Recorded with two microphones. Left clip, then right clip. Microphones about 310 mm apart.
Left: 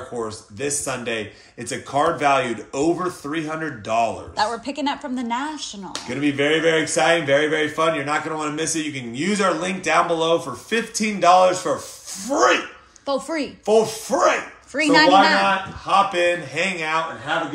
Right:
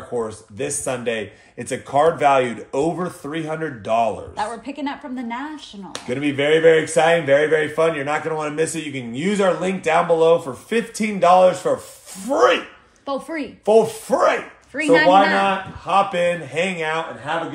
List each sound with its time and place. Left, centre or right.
0.1 s a man's voice: right
4.4 s a woman's voice: centre
5.9 s a man's voice: right
13.0 s a woman's voice: centre
13.7 s a man's voice: right
14.7 s a woman's voice: centre
16.1 s a man's voice: right